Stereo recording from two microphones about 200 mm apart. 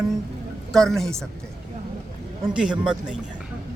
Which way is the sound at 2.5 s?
5° right (ahead or behind).